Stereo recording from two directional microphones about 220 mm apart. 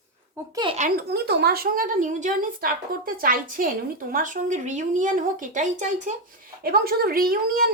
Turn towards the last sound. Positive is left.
turn(degrees=-40)  # may be behind; listen again after turning